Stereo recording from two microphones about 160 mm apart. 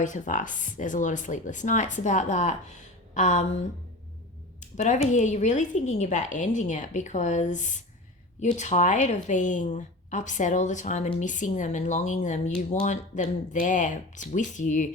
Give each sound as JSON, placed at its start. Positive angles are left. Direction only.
{"t": 0.0, "sound": "a woman's voice", "side_deg": 50}
{"t": 4.6, "sound": "a woman's voice", "side_deg": 50}